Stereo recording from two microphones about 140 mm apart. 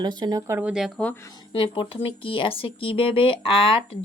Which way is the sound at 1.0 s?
10° left (ahead or behind).